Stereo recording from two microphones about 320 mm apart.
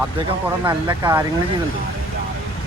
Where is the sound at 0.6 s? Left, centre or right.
Centre.